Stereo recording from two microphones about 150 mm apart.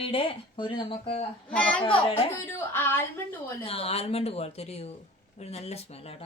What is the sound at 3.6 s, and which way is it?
Speech, 40° left (ahead or behind).